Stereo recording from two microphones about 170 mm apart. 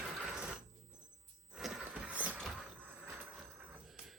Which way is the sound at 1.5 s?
5° right (ahead or behind).